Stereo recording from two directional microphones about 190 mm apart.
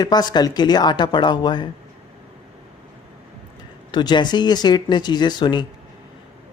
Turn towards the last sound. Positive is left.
turn(degrees=25)  # may be behind; listen again after turning